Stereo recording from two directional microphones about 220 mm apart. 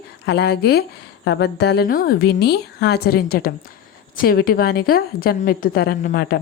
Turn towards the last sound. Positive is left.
turn(degrees=45)  # may be behind; listen again after turning